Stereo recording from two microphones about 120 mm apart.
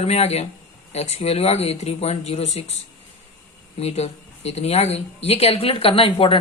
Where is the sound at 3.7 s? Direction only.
60° left (ahead or behind).